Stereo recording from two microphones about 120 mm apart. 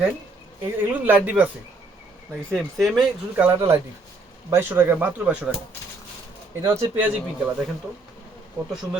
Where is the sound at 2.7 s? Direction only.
Centre (ahead or behind).